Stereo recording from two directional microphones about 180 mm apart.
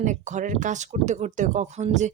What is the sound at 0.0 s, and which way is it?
Speech, 45° right (ahead or behind).